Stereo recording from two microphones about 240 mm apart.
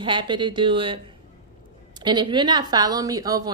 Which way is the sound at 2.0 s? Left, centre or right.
Centre.